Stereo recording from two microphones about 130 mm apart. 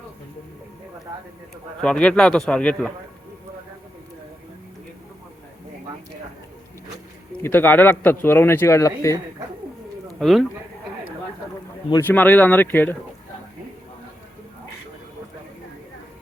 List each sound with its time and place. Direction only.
1.8 s a man's voice: 5° left (ahead or behind)
7.4 s a man's voice: 15° left (ahead or behind)
10.2 s speech: centre (ahead or behind)
11.9 s a man's voice: 15° left (ahead or behind)